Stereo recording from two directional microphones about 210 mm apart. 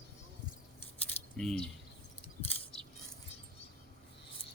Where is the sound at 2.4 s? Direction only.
30° left (ahead or behind).